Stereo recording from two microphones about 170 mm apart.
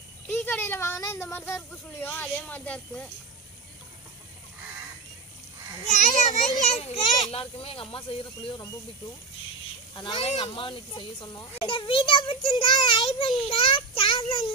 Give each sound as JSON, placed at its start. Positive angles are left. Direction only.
{"t": 0.3, "sound": "speech", "side_deg": 10}
{"t": 5.9, "sound": "a child's voice", "side_deg": 45}
{"t": 9.9, "sound": "a child's voice", "side_deg": 25}